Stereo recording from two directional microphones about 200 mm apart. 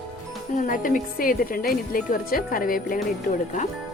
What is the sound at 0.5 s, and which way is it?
Speech, 40° left (ahead or behind).